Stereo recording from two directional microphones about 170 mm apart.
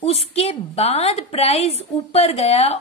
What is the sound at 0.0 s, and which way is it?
A woman's voice, 35° left (ahead or behind).